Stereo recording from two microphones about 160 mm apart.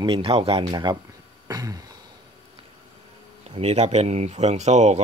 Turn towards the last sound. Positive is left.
turn(degrees=-45)  # may be behind; listen again after turning